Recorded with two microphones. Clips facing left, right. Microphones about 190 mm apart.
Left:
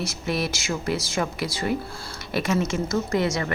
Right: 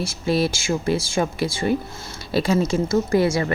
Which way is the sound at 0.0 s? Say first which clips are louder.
Right 6 dB; 30° right (ahead or behind).